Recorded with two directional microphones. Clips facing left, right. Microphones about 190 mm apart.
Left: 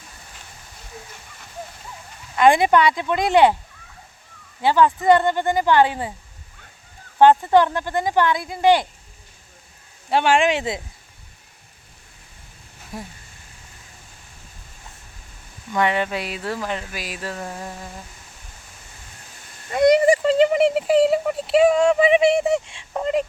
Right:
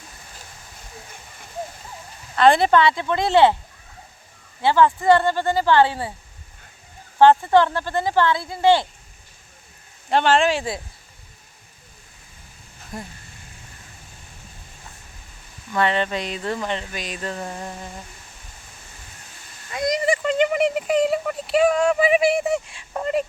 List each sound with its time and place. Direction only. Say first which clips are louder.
2.3 s speech: even; 15° left (ahead or behind)
4.6 s speech: even; 15° left (ahead or behind)
7.2 s speech: even; 20° left (ahead or behind)
10.1 s speech: even; 10° left (ahead or behind)
12.9 s speech: even; 5° left (ahead or behind)
15.7 s speech: even; 15° left (ahead or behind)
19.7 s speech: left 9 dB; 60° left (ahead or behind)
20.1 s speech: left 4 dB; 30° left (ahead or behind)